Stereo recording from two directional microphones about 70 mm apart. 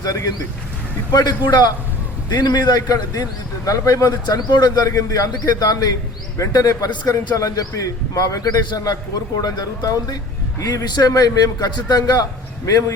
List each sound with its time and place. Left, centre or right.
0.0 s speech: left
1.1 s a man's voice: left
4.4 s speech: left
6.3 s a man's voice: left